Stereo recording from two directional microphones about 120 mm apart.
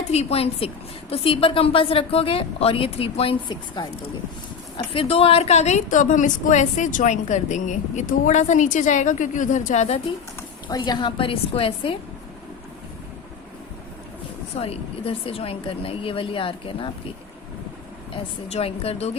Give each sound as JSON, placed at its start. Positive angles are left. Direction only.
{"t": 0.1, "sound": "a woman's voice", "side_deg": 60}
{"t": 4.8, "sound": "a woman's voice", "side_deg": 50}
{"t": 10.7, "sound": "speech", "side_deg": 40}
{"t": 14.5, "sound": "speech", "side_deg": 55}
{"t": 18.1, "sound": "a woman's voice", "side_deg": 55}